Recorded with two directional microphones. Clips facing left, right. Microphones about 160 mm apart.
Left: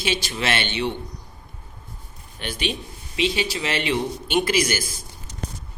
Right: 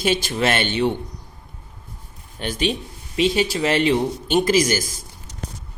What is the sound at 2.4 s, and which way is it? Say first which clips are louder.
A man's voice: right 5 dB; 40° right (ahead or behind).